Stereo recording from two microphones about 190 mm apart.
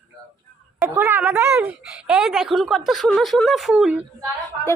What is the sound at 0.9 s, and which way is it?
A woman's voice, 10° right (ahead or behind).